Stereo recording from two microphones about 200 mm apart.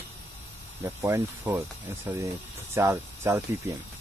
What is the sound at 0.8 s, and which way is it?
Speech, 15° right (ahead or behind).